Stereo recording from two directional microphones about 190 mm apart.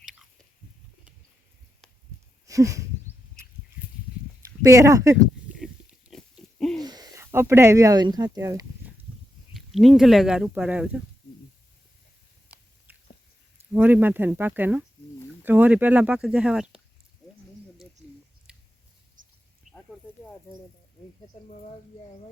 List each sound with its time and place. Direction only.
2.5 s a sound: 15° right (ahead or behind)
4.6 s speech: 15° right (ahead or behind)
5.5 s pig: centre (ahead or behind)
6.8 s speech: 20° right (ahead or behind)
9.6 s speech: centre (ahead or behind)
12.9 s squish: 10° right (ahead or behind)
13.7 s speech: 10° right (ahead or behind)
18.0 s a sound: 5° right (ahead or behind)
18.5 s chewing: 5° right (ahead or behind)
19.7 s snake: 40° right (ahead or behind)